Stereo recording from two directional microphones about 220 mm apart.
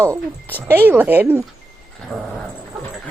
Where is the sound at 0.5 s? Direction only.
10° right (ahead or behind).